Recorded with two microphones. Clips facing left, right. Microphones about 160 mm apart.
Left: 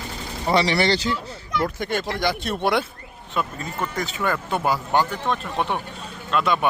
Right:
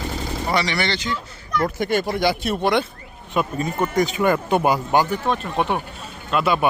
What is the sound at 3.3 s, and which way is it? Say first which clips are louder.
Speech: right 5 dB; 15° right (ahead or behind).